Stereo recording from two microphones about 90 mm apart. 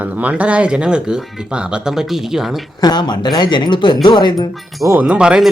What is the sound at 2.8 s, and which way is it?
Speech, 50° left (ahead or behind).